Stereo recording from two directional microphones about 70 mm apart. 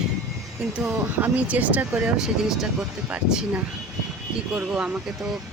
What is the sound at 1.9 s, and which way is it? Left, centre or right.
Speech, centre.